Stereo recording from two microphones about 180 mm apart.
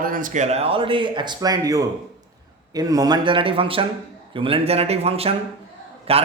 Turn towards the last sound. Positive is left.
turn(degrees=-30)  # may be behind; listen again after turning